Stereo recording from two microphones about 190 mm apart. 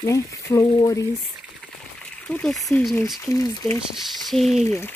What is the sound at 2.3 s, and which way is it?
Speech, 5° left (ahead or behind).